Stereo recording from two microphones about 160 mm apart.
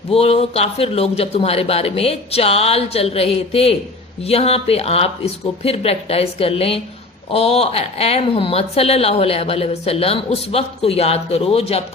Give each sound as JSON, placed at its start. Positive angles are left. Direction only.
{"t": 0.1, "sound": "speech", "side_deg": 40}